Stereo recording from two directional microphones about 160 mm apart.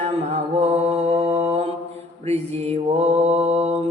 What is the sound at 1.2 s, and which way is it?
Mantra, 40° right (ahead or behind).